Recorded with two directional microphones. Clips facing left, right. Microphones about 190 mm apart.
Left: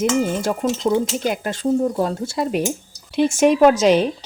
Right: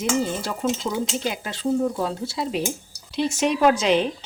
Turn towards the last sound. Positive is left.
turn(degrees=40)  # may be behind; listen again after turning